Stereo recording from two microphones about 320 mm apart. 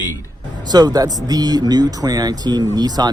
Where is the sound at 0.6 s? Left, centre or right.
Centre.